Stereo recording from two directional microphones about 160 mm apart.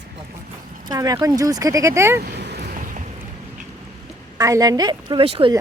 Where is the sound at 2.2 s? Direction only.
90° right; by 3.1 s 55° right (ahead or behind).